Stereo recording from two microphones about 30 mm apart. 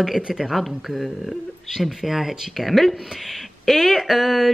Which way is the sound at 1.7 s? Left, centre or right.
Centre.